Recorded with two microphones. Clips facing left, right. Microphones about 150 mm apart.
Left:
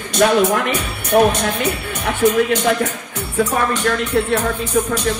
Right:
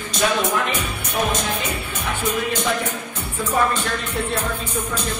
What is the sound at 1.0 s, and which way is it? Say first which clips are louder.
Speech: left 10 dB; 65° left (ahead or behind).